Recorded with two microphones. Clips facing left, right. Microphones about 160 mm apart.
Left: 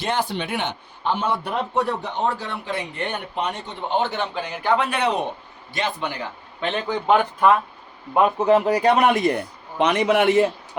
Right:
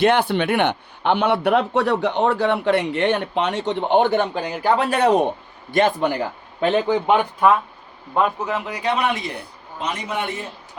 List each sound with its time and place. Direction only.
0.0 s a man's voice: 60° right (ahead or behind)
4.4 s a man's voice: 35° right (ahead or behind)
7.1 s speech: 10° right (ahead or behind)
8.4 s speech: 40° left (ahead or behind)
9.7 s a man's voice: 75° left (ahead or behind); by 10.5 s 90° left